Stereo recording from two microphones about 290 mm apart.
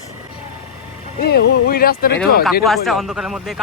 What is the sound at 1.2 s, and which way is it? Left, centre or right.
Speech, left.